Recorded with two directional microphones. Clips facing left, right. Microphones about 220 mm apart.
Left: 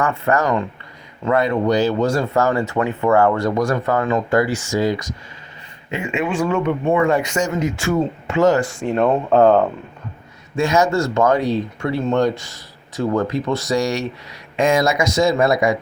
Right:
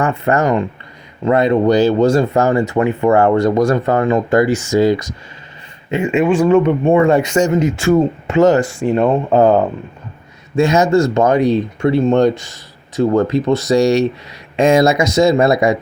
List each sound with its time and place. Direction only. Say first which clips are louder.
0.0 s speech: right 3 dB; 20° right (ahead or behind)
6.0 s speech: right 8 dB; 40° right (ahead or behind)
6.4 s speech: right 6 dB; 25° right (ahead or behind)
8.7 s speech: right 3 dB; 5° right (ahead or behind)
10.6 s speech: right 5 dB; 20° right (ahead or behind)